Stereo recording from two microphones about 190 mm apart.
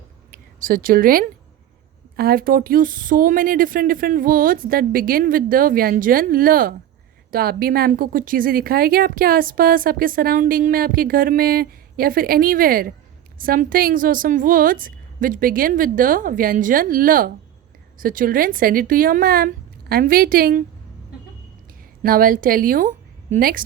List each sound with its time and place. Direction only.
0.6 s speech: 50° right (ahead or behind)
22.0 s a woman's voice: 50° right (ahead or behind)